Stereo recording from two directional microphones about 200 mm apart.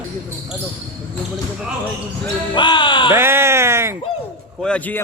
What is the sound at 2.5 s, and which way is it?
Speech, 25° left (ahead or behind).